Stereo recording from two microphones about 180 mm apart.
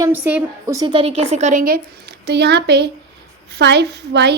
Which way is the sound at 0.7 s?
25° right (ahead or behind).